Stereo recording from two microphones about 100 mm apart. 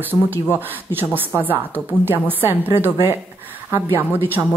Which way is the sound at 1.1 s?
20° right (ahead or behind).